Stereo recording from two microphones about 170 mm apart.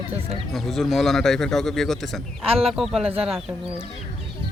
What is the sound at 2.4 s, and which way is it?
Speech, 35° right (ahead or behind).